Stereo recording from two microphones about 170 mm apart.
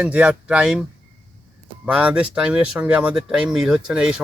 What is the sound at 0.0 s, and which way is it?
Speech, 10° right (ahead or behind).